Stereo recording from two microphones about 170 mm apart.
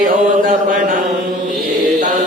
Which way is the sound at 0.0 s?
55° right (ahead or behind).